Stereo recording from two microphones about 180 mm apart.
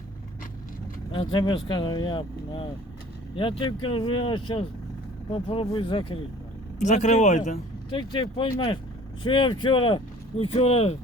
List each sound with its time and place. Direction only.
1.1 s speech: 25° left (ahead or behind)
6.7 s speech: 40° left (ahead or behind)
7.9 s speech: 25° left (ahead or behind)